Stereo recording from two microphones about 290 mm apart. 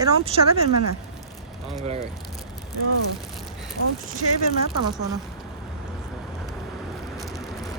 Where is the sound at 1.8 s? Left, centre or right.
Centre.